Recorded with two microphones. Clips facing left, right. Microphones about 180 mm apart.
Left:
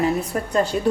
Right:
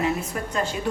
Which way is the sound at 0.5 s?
35° left (ahead or behind).